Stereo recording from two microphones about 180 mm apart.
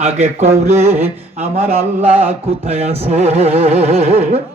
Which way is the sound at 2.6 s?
35° right (ahead or behind).